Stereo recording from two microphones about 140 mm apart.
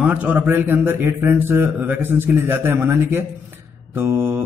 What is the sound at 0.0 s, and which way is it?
Speech, 10° right (ahead or behind).